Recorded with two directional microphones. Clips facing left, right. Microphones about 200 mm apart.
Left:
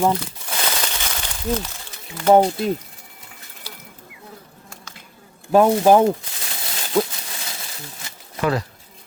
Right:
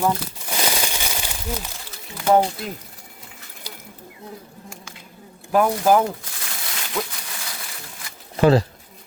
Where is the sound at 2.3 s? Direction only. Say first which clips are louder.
Left 4 dB; 25° left (ahead or behind).